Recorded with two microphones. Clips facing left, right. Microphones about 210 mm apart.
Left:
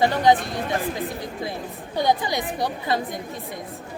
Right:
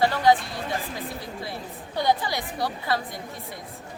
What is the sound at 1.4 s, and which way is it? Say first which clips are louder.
A woman's voice: left 4 dB; 15° left (ahead or behind).